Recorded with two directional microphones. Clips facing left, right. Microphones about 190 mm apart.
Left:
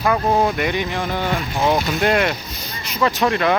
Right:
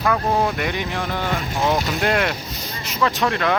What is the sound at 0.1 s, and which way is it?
Speech, 15° left (ahead or behind).